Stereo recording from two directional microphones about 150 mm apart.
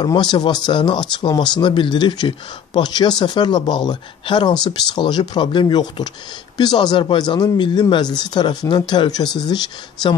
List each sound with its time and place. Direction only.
0.0 s speech: 30° left (ahead or behind)